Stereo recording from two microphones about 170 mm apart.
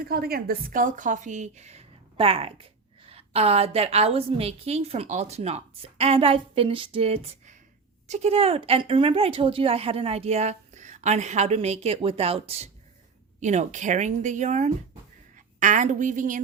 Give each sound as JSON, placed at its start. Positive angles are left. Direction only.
{"t": 0.0, "sound": "speech", "side_deg": -65}